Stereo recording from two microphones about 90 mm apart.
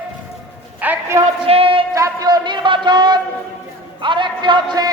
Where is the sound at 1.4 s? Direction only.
85° right.